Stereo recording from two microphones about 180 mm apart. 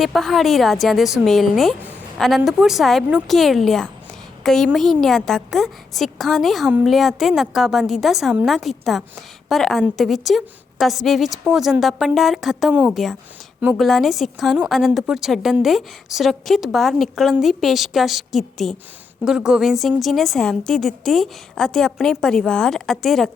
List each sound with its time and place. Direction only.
0.0 s a woman's voice: centre (ahead or behind)